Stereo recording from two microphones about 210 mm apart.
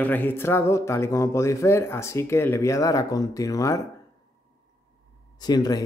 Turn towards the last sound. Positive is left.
turn(degrees=20)  # may be behind; listen again after turning